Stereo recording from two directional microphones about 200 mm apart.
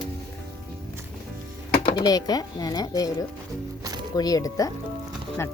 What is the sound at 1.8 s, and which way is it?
Speech, 20° left (ahead or behind).